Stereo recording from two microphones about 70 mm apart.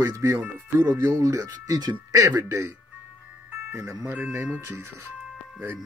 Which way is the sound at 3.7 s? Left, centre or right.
Right.